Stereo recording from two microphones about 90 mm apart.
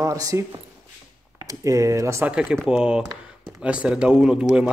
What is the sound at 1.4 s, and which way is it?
Speech, 35° right (ahead or behind).